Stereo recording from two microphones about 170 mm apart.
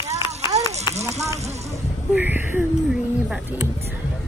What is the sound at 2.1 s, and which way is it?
Speech, 10° right (ahead or behind).